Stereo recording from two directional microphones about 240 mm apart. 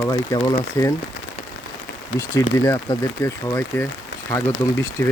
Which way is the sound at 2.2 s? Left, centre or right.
Centre.